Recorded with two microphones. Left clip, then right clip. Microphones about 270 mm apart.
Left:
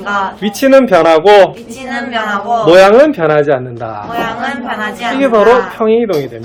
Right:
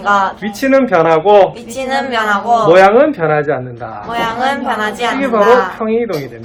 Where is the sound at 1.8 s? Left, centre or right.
Right.